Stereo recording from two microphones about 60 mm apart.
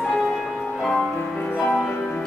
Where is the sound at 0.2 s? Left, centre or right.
Centre.